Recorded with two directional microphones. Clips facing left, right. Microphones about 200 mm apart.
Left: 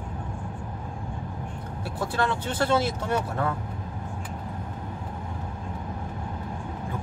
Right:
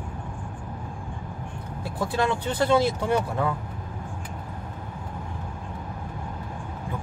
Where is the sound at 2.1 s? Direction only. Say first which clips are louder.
Right 2 dB; 15° right (ahead or behind).